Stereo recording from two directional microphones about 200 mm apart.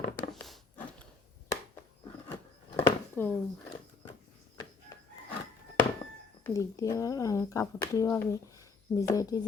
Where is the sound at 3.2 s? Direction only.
10° left (ahead or behind).